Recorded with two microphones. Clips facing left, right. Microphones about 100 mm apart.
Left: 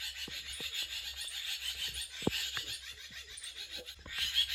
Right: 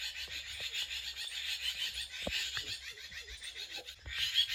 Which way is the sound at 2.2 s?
30° left (ahead or behind).